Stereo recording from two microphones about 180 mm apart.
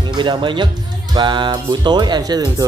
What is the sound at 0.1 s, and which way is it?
Speech, 25° right (ahead or behind).